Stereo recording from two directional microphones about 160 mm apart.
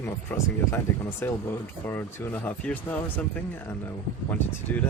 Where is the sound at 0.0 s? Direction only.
15° left (ahead or behind).